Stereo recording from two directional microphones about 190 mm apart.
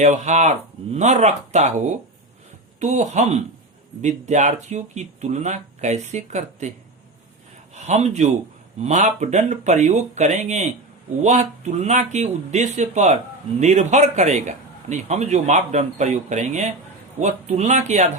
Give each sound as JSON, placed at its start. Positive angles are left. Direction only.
{"t": 0.0, "sound": "a man's voice", "side_deg": -40}
{"t": 2.8, "sound": "a man's voice", "side_deg": -40}
{"t": 7.9, "sound": "a man's voice", "side_deg": -35}